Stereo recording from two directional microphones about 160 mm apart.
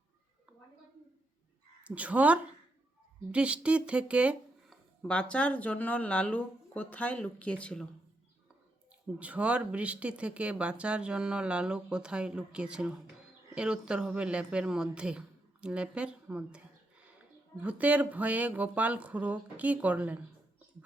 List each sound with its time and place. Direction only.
1.9 s a woman's voice: 10° right (ahead or behind)
5.0 s speech: 5° left (ahead or behind)
9.1 s speech: 10° right (ahead or behind)